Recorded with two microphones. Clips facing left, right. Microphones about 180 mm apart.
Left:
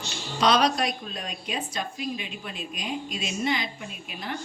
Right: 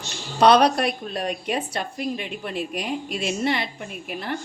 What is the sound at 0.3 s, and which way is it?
A woman's voice, 60° right (ahead or behind).